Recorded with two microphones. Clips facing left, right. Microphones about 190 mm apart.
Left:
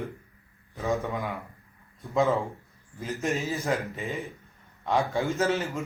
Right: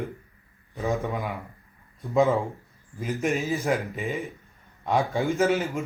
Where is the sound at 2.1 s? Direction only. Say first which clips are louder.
Right 3 dB; 15° right (ahead or behind).